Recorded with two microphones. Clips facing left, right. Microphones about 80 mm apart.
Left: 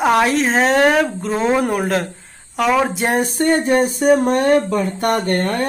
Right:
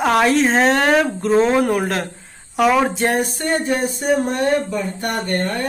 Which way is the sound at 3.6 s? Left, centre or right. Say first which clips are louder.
Left 5 dB; left.